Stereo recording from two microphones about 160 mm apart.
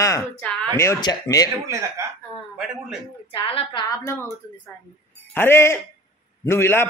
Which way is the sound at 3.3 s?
35° left (ahead or behind).